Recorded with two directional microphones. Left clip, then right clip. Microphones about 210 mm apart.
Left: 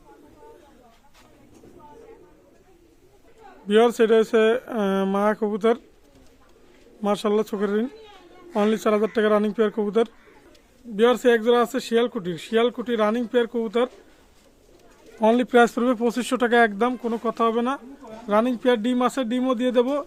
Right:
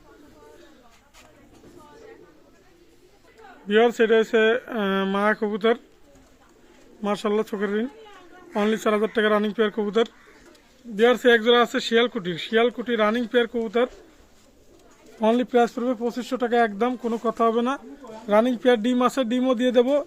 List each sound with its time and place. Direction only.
3.7 s speech: 15° left (ahead or behind)
7.0 s speech: 15° left (ahead or behind)
15.2 s speech: 10° left (ahead or behind)
15.4 s speech: 30° left (ahead or behind)
16.7 s speech: 10° left (ahead or behind)
17.0 s speech: centre (ahead or behind)